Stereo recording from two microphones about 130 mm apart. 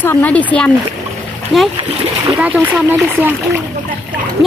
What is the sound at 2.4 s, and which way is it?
Speech, 10° right (ahead or behind).